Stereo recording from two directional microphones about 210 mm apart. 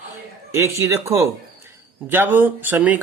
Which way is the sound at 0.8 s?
15° right (ahead or behind).